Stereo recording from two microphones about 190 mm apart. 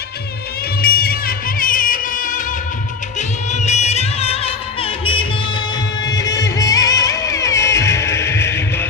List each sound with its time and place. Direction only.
0.8 s music: 50° left (ahead or behind); by 8.9 s 15° left (ahead or behind)